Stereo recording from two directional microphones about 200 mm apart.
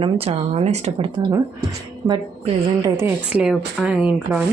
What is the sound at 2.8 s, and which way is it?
Speech, 15° right (ahead or behind).